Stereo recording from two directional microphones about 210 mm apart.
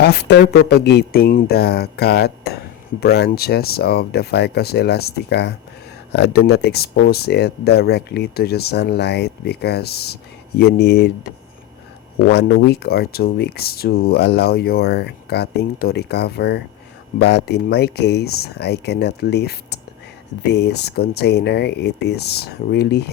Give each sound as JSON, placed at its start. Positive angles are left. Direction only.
{"t": 0.0, "sound": "speech", "side_deg": 55}
{"t": 12.3, "sound": "speech", "side_deg": 50}